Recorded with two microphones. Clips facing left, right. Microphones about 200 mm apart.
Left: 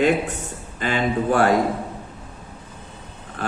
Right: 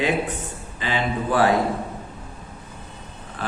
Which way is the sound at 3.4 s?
50° left (ahead or behind).